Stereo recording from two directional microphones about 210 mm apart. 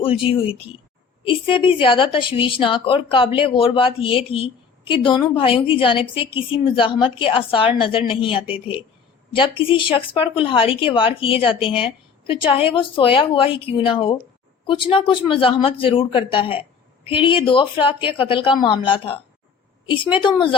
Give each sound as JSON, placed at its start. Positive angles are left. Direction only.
{"t": 0.3, "sound": "a woman's voice", "side_deg": 25}
{"t": 20.2, "sound": "a woman's voice", "side_deg": 25}